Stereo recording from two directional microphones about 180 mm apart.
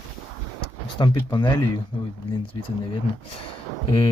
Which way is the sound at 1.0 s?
25° left (ahead or behind).